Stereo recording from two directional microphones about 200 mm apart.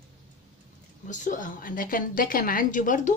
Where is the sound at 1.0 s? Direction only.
40° left (ahead or behind).